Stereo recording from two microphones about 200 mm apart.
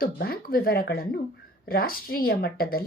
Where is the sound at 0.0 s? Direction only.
50° left (ahead or behind).